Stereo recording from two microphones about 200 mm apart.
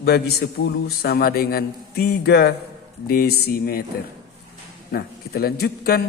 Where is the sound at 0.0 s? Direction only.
50° left (ahead or behind).